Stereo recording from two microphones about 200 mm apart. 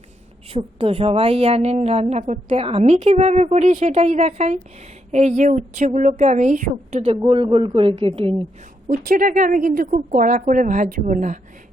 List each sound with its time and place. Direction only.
0.4 s a woman's voice: 30° right (ahead or behind)
7.2 s speech: 25° right (ahead or behind)
8.9 s a woman's voice: 45° right (ahead or behind)